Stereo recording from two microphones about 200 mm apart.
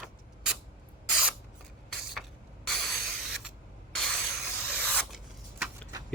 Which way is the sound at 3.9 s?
Centre (ahead or behind).